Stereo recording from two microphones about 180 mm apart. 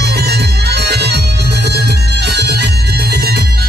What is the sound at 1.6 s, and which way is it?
Bagpipes, 65° right (ahead or behind).